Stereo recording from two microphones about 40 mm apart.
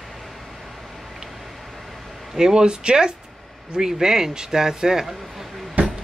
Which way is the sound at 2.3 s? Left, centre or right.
Centre.